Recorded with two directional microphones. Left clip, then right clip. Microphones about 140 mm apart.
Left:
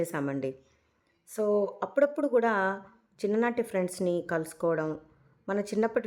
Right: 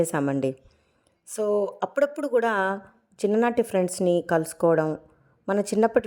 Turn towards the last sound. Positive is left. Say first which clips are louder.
# right 7 dB
turn(degrees=-35)  # may be behind; listen again after turning